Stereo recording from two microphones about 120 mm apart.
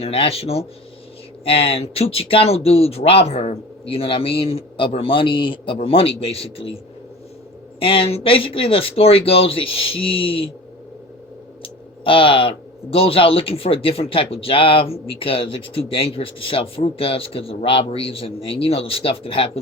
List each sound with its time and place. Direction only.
0.0 s speech: 55° left (ahead or behind)
7.8 s speech: 50° left (ahead or behind)
11.6 s speech: 50° left (ahead or behind)